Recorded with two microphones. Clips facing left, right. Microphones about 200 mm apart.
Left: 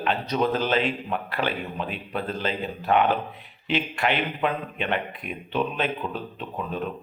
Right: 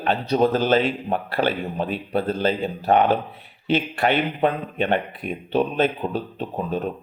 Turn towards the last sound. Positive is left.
turn(degrees=-40)  # may be behind; listen again after turning